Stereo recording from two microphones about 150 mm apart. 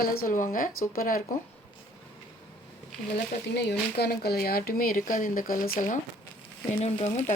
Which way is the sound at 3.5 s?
90° left.